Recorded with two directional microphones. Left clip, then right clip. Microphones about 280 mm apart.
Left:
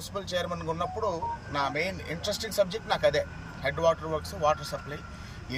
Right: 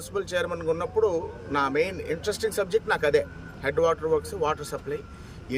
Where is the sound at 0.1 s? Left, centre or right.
Centre.